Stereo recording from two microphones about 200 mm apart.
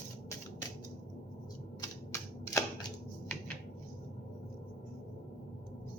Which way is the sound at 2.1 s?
15° left (ahead or behind).